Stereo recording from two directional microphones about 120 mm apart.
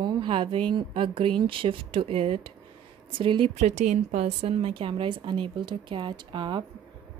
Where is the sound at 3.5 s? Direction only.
80° right; by 6.6 s 40° right (ahead or behind).